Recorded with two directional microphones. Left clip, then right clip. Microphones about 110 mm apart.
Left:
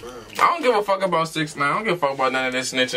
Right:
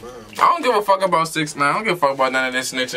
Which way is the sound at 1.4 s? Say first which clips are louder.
Right 3 dB; 35° right (ahead or behind).